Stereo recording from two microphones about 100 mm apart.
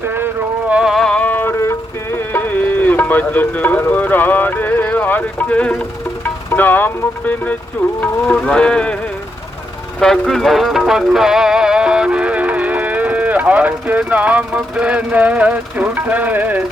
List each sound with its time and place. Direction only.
0.0 s a sound: 25° right (ahead or behind)
0.7 s music: 5° right (ahead or behind); by 5.7 s 10° left (ahead or behind)
6.5 s speech: 20° left (ahead or behind)
10.0 s music: 5° left (ahead or behind); by 16.6 s 15° right (ahead or behind)